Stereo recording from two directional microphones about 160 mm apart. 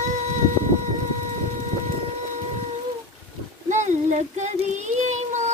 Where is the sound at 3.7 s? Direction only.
45° right (ahead or behind).